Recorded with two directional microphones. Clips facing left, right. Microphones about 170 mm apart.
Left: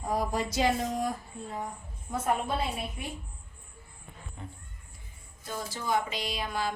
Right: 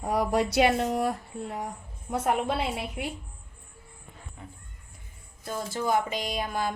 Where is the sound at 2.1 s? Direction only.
75° right (ahead or behind).